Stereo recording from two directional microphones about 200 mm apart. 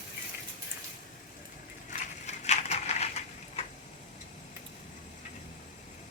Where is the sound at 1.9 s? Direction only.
35° left (ahead or behind).